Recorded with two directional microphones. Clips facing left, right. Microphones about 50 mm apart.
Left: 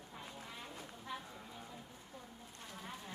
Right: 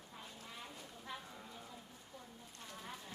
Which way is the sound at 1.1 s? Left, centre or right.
Centre.